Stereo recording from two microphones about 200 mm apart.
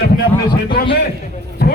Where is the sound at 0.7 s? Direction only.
50° left (ahead or behind).